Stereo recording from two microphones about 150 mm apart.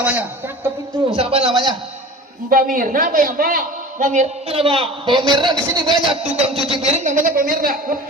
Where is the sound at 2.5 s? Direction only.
65° right (ahead or behind); by 6.0 s 30° right (ahead or behind).